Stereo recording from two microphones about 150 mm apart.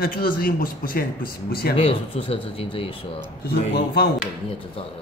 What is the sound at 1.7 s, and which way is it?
Speech, 35° left (ahead or behind).